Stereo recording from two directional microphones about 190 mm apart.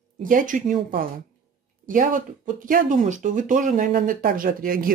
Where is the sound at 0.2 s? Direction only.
45° right (ahead or behind).